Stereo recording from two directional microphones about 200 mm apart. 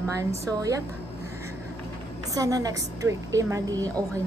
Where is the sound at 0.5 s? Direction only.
15° right (ahead or behind).